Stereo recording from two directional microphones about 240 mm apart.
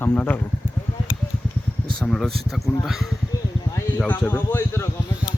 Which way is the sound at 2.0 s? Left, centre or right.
Centre.